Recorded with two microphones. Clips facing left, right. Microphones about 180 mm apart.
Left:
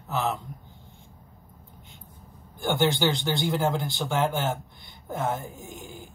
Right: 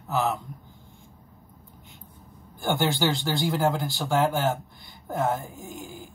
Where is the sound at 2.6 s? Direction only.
20° left (ahead or behind).